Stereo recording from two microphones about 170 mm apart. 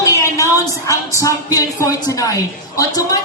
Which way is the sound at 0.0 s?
20° left (ahead or behind).